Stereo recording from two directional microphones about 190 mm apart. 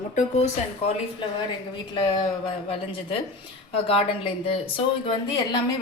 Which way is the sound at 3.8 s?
30° left (ahead or behind).